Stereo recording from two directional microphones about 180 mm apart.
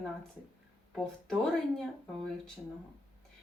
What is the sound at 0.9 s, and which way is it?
Speech, 5° left (ahead or behind).